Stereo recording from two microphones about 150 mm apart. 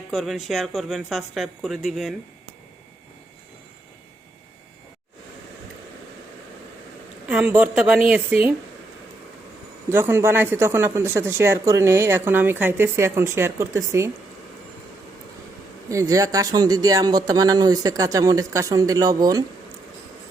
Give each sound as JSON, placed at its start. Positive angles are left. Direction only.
{"t": 0.1, "sound": "speech", "side_deg": 0}
{"t": 7.3, "sound": "speech", "side_deg": -10}
{"t": 9.9, "sound": "speech", "side_deg": -15}
{"t": 15.9, "sound": "speech", "side_deg": -20}